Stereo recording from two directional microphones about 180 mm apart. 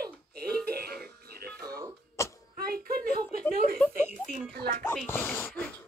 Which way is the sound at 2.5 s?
55° right (ahead or behind).